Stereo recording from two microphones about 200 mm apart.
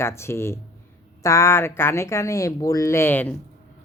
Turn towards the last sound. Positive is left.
turn(degrees=10)  # may be behind; listen again after turning